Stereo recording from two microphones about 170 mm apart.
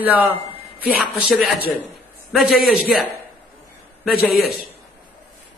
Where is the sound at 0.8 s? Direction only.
5° left (ahead or behind).